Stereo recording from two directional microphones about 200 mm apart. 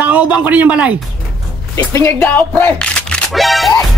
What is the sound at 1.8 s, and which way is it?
Speech, 15° left (ahead or behind).